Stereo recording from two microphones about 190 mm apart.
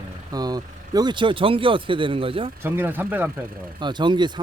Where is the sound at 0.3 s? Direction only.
20° right (ahead or behind).